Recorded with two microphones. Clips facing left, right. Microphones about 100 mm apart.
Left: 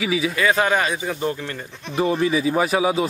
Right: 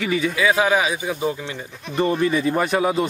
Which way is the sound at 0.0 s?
Centre (ahead or behind).